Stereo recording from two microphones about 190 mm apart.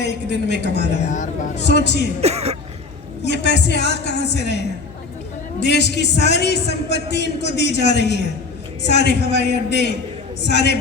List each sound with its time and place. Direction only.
0.0 s a man's voice: 65° left (ahead or behind)
1.1 s speech: 40° left (ahead or behind)
1.6 s a man's voice: 65° left (ahead or behind)
2.2 s speech: 35° right (ahead or behind)
3.2 s a man's voice: 65° left (ahead or behind)